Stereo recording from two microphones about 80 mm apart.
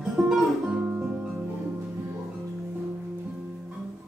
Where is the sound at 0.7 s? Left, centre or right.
Centre.